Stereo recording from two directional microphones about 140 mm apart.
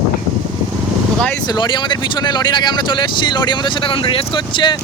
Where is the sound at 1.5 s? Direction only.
35° left (ahead or behind).